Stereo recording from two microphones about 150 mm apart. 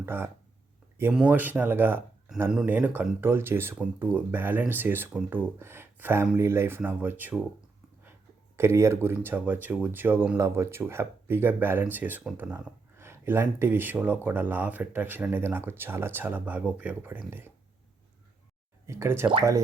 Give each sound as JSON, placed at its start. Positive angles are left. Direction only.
{"t": 0.0, "sound": "speech", "side_deg": -15}
{"t": 8.5, "sound": "speech", "side_deg": -20}
{"t": 18.9, "sound": "speech", "side_deg": -20}